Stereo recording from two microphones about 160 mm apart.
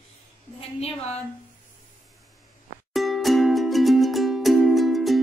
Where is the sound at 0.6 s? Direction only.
40° left (ahead or behind).